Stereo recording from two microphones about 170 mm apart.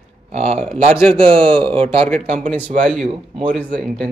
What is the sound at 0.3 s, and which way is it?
Speech, 35° right (ahead or behind).